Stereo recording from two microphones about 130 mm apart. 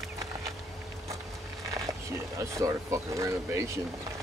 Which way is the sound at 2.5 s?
25° right (ahead or behind).